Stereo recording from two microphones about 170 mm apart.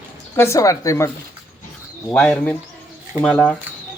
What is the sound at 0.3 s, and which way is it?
Speech, 15° left (ahead or behind).